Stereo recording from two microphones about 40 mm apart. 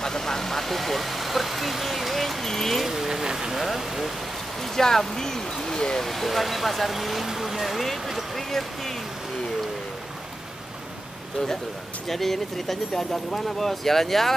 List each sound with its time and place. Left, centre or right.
0.0 s vehicle: centre
2.9 s vehicle: centre
3.6 s a sound: centre
4.6 s speech: centre
6.0 s speech: centre
8.4 s speech: centre
12.1 s speech: centre